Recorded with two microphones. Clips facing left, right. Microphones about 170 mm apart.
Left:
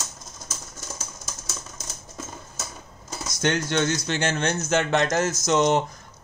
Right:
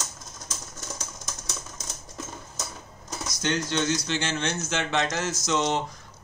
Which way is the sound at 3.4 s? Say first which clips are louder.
Left 4 dB; 55° left (ahead or behind).